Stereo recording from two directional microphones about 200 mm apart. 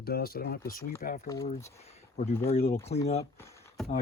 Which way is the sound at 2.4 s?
50° left (ahead or behind).